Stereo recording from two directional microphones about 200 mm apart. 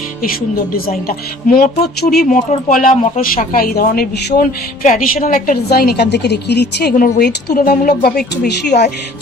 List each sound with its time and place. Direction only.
0.7 s a woman's voice: 45° left (ahead or behind)